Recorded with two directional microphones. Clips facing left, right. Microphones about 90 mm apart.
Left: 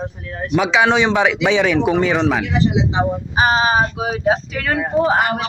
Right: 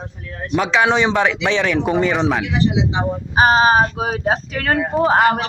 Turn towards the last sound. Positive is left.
turn(degrees=-40)  # may be behind; listen again after turning